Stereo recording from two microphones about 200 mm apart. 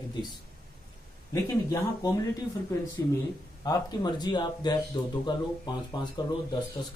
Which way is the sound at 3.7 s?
20° left (ahead or behind).